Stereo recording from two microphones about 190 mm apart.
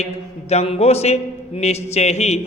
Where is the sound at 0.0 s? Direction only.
35° left (ahead or behind).